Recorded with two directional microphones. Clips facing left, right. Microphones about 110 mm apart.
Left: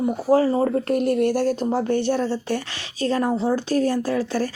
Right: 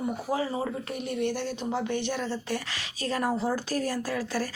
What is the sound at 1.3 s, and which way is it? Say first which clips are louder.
Speech: left 9 dB; 40° left (ahead or behind).